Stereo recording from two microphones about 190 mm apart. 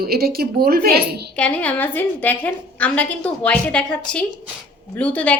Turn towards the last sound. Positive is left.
turn(degrees=5)  # may be behind; listen again after turning